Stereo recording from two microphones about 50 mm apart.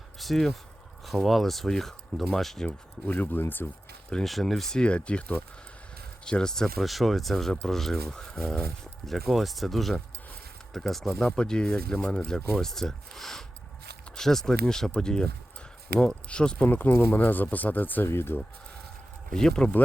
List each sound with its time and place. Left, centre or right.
0.2 s speech: centre
2.6 s speech: left
4.3 s speech: centre
4.8 s speech: left
6.2 s speech: centre
6.7 s speech: centre
12.5 s speech: centre
16.3 s speech: centre
16.6 s speech: left
18.1 s speech: left
19.3 s speech: centre